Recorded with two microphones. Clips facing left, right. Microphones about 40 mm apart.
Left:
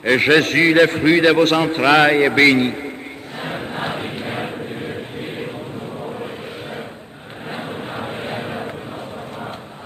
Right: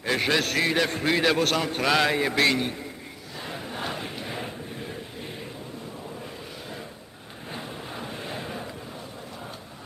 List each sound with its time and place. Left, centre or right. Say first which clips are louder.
0.0 s a man's voice: left 10 dB; left
3.4 s crowd: left 8 dB; left
7.5 s a sound: left 8 dB; left